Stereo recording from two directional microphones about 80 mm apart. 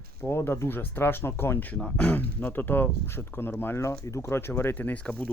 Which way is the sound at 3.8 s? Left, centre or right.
Left.